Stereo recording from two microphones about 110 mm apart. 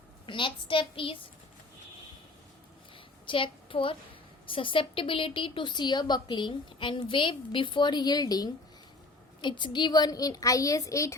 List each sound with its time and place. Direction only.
0.3 s a woman's voice: 50° left (ahead or behind)
2.9 s a sound: 50° left (ahead or behind)
4.4 s a woman's voice: 50° left (ahead or behind); by 11.1 s 30° left (ahead or behind)